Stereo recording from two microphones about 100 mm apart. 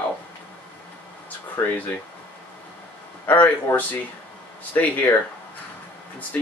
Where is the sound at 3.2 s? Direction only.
15° left (ahead or behind).